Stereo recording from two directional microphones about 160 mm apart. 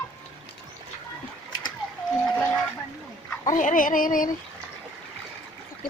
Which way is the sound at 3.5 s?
55° left (ahead or behind).